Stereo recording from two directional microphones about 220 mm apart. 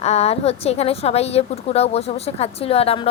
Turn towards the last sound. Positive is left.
turn(degrees=25)  # may be behind; listen again after turning